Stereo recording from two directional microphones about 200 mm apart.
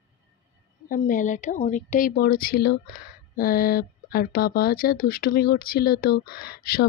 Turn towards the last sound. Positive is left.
turn(degrees=50)  # may be behind; listen again after turning